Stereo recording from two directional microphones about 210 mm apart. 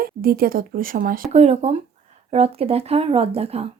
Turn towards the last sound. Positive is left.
turn(degrees=-30)  # may be behind; listen again after turning